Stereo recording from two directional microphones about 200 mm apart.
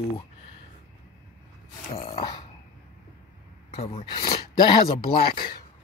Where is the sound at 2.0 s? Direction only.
25° left (ahead or behind).